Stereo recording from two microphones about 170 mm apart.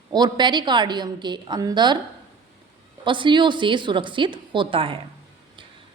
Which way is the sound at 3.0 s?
30° right (ahead or behind).